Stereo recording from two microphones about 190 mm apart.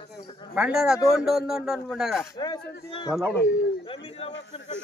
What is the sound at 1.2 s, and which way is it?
Speech, centre (ahead or behind).